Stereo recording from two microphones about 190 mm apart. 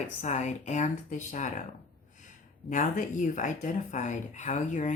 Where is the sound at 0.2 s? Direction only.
35° left (ahead or behind).